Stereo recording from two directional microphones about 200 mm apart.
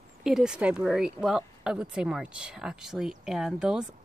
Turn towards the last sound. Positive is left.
turn(degrees=-5)  # may be behind; listen again after turning